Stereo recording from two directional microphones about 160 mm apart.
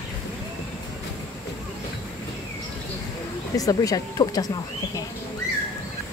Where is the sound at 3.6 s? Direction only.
20° left (ahead or behind).